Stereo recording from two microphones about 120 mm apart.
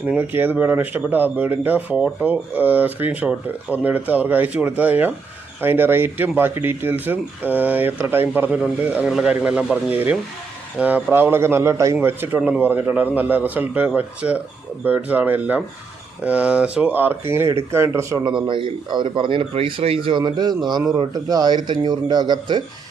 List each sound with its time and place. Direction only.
0.0 s speech: 15° right (ahead or behind)
18.4 s speech: 45° right (ahead or behind)